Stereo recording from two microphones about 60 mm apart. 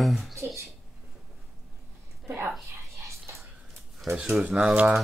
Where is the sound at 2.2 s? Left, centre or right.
Right.